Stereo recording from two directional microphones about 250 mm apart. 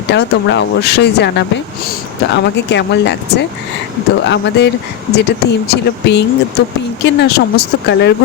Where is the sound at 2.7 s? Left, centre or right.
Left.